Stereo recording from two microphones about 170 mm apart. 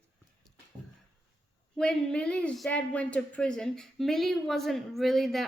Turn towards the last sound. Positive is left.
turn(degrees=0)  # may be behind; listen again after turning